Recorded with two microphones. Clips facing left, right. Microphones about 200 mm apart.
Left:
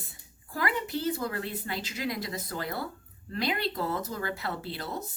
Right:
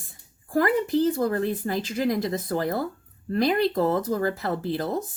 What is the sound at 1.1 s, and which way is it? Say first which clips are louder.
A woman's voice: right 9 dB; 45° right (ahead or behind).